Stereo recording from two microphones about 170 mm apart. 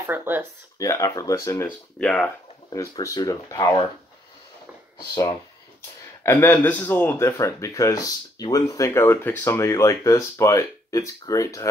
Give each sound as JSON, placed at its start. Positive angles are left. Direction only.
{"t": 0.0, "sound": "speech", "side_deg": -10}
{"t": 0.7, "sound": "speech", "side_deg": 20}
{"t": 2.0, "sound": "speech", "side_deg": 5}
{"t": 2.7, "sound": "speech", "side_deg": 20}
{"t": 6.2, "sound": "speech", "side_deg": 15}